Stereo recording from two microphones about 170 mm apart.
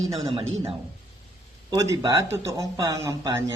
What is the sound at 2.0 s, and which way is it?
Speech, 20° right (ahead or behind).